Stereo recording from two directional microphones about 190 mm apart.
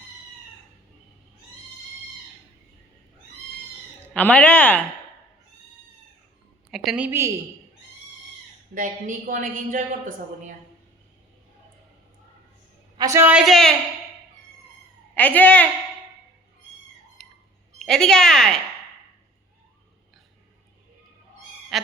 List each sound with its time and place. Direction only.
4.1 s speech: 5° left (ahead or behind)
6.7 s a woman's voice: centre (ahead or behind)
8.7 s a woman's voice: 45° right (ahead or behind)
13.0 s speech: 15° right (ahead or behind); by 13.7 s centre (ahead or behind)
15.1 s a woman's voice: 10° left (ahead or behind)
17.2 s a sound: 5° left (ahead or behind)
17.7 s speech: centre (ahead or behind)
21.7 s a sound: centre (ahead or behind)